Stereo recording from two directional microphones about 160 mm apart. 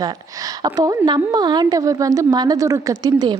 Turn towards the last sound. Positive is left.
turn(degrees=-25)  # may be behind; listen again after turning